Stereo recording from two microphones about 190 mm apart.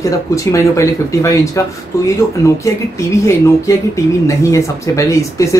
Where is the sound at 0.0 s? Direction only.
15° left (ahead or behind).